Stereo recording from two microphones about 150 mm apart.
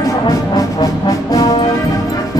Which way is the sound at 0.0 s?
25° left (ahead or behind).